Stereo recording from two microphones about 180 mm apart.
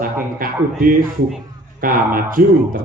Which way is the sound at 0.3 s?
50° right (ahead or behind).